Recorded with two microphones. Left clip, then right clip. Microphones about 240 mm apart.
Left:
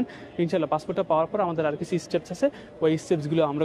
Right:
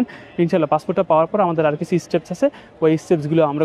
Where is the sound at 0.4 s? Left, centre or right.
Right.